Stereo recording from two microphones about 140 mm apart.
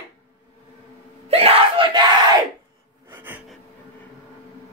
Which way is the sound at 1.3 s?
45° right (ahead or behind).